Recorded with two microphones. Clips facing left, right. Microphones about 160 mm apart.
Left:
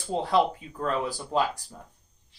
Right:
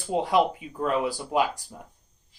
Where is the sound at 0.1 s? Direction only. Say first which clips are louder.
Right 1 dB; 10° right (ahead or behind).